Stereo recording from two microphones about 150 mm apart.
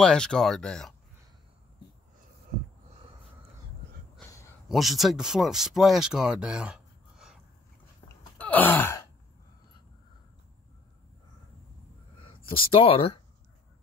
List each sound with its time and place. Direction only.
0.0 s speech: 5° left (ahead or behind)
4.6 s speech: centre (ahead or behind)
8.4 s a sound: 10° left (ahead or behind)
12.2 s speech: 35° left (ahead or behind)